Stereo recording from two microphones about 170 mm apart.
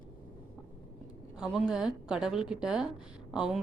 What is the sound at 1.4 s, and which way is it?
Speech, 5° right (ahead or behind).